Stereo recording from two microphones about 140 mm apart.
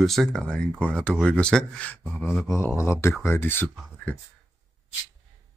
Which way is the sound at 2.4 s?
20° left (ahead or behind).